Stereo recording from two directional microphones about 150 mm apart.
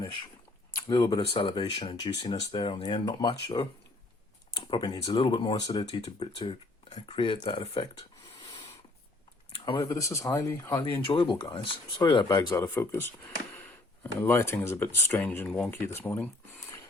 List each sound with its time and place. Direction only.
0.9 s speech: 25° left (ahead or behind)
8.3 s a sound: 40° left (ahead or behind)
9.9 s speech: 20° left (ahead or behind)
10.8 s speech: 35° left (ahead or behind)
12.6 s speech: 15° left (ahead or behind)